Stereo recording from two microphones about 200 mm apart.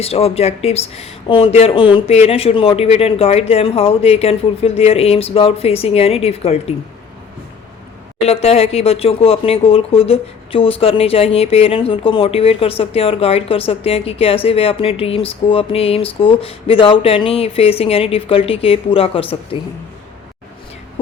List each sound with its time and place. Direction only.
0.0 s speech: 30° left (ahead or behind)
8.2 s speech: 30° left (ahead or behind)